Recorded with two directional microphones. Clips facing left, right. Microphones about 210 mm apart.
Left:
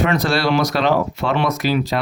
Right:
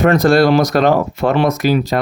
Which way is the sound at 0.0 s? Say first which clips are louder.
Right 7 dB; 45° right (ahead or behind).